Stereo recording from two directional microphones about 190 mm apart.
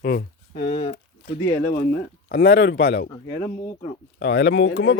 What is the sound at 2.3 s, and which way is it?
Speech, 55° left (ahead or behind).